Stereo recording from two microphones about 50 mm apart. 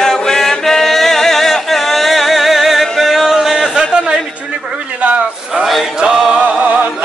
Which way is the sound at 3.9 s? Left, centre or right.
Centre.